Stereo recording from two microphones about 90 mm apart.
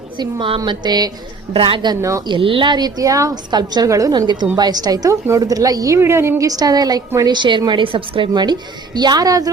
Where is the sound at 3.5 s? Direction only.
50° right (ahead or behind).